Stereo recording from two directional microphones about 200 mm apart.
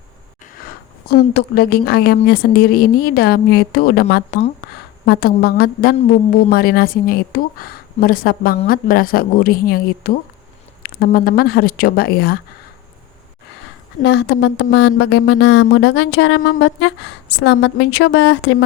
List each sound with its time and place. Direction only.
1.0 s speech: 50° left (ahead or behind)
14.0 s a woman's voice: 60° left (ahead or behind)